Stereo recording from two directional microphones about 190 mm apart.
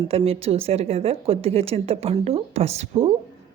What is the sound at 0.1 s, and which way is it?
Speech, 30° right (ahead or behind).